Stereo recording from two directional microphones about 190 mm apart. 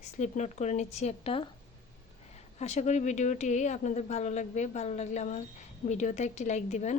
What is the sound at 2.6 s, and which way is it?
A woman's voice, 35° left (ahead or behind).